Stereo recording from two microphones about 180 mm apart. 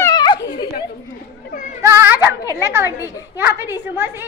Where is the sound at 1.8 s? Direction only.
15° right (ahead or behind).